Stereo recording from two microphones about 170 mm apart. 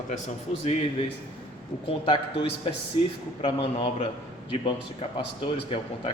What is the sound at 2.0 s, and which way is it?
Speech, 30° left (ahead or behind).